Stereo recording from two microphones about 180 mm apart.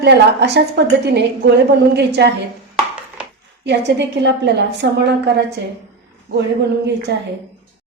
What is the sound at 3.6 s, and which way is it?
A woman's voice, 75° right (ahead or behind).